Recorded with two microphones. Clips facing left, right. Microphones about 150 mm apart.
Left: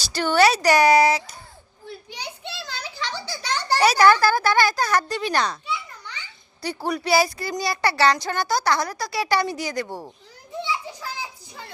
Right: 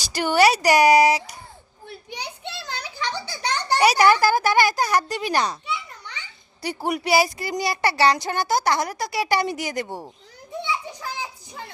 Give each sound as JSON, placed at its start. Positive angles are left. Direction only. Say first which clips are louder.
{"t": 0.0, "sound": "a child's voice", "louder": "even", "side_deg": -15}
{"t": 2.0, "sound": "a sound", "louder": "right 4 dB", "side_deg": -15}
{"t": 3.4, "sound": "a child's voice", "louder": "right 1 dB", "side_deg": -15}
{"t": 10.6, "sound": "children playing", "louder": "even", "side_deg": -20}